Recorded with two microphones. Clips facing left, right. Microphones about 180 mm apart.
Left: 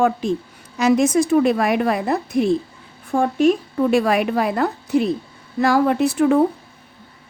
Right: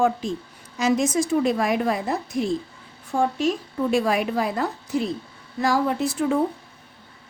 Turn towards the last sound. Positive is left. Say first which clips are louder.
# left 6 dB
turn(degrees=65)  # may be behind; listen again after turning